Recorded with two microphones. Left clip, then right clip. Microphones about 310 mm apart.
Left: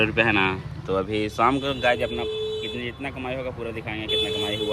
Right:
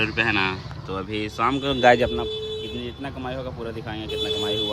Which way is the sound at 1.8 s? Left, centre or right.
Right.